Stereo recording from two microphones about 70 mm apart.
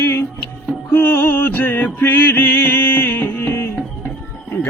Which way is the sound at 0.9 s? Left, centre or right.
Left.